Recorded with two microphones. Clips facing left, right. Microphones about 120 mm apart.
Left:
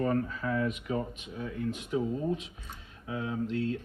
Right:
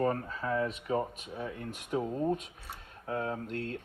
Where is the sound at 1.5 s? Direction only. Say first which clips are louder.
Left 5 dB; 55° right (ahead or behind).